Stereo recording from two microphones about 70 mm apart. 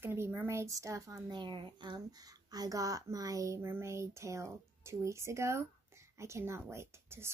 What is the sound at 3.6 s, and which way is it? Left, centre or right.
Speech, right.